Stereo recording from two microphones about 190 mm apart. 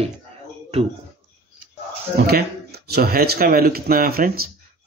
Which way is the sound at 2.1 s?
55° right (ahead or behind).